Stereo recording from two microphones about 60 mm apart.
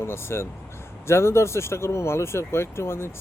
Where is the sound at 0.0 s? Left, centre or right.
Left.